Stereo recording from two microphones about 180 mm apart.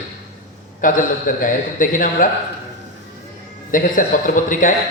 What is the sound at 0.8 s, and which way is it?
A man's voice, 50° left (ahead or behind).